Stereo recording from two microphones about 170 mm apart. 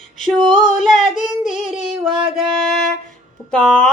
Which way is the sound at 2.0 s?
30° right (ahead or behind).